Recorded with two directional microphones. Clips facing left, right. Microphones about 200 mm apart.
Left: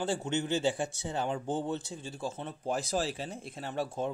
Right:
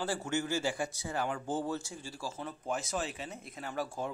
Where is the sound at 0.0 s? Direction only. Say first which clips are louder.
Left 2 dB; 20° left (ahead or behind).